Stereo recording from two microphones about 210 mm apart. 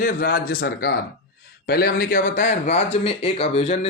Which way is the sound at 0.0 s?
45° left (ahead or behind).